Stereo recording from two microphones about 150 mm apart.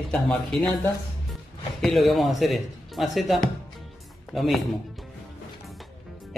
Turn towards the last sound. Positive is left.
turn(degrees=0)  # may be behind; listen again after turning